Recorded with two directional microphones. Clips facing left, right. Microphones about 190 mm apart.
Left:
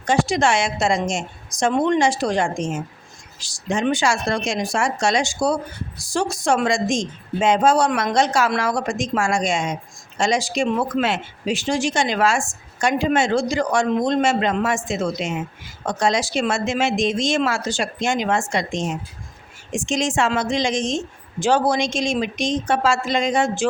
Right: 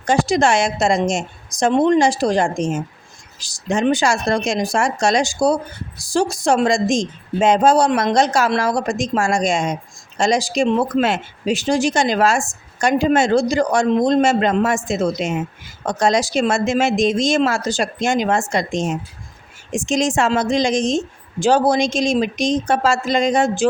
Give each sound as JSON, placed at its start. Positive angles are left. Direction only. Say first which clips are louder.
{"t": 0.0, "sound": "a woman's voice", "louder": "right 3 dB", "side_deg": -40}
{"t": 11.0, "sound": "a woman's voice", "louder": "right 3 dB", "side_deg": -40}